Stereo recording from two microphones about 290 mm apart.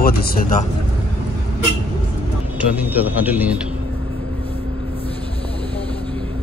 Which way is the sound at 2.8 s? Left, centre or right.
Centre.